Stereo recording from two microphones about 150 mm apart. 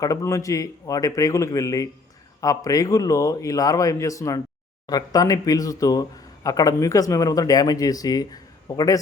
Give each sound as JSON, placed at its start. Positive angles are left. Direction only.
{"t": 0.0, "sound": "speech", "side_deg": 20}